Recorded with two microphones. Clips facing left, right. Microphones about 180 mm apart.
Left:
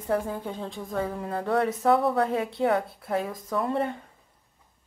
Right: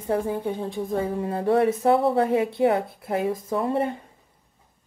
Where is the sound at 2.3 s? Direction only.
15° right (ahead or behind).